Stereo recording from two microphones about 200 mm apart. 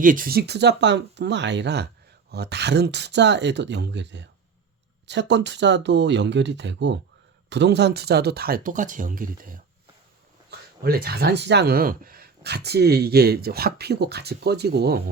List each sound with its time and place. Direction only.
0.0 s speech: 45° right (ahead or behind)
10.8 s speech: 50° right (ahead or behind)